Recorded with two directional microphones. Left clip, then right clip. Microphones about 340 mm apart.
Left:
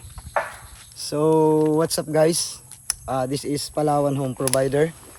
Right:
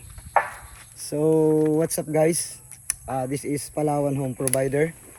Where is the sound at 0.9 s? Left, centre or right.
Centre.